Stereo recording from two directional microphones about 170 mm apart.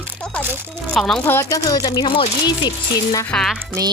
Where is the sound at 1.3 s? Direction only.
15° left (ahead or behind).